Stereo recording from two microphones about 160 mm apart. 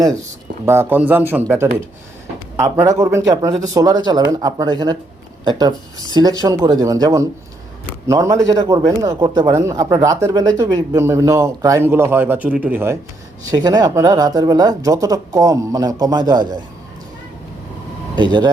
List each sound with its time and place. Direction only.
0.6 s speech: 15° right (ahead or behind)
13.5 s speech: 25° right (ahead or behind)
18.2 s speech: 25° right (ahead or behind)